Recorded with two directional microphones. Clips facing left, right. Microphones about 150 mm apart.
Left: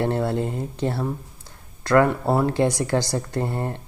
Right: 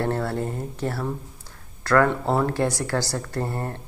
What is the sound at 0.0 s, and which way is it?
Speech, 20° left (ahead or behind).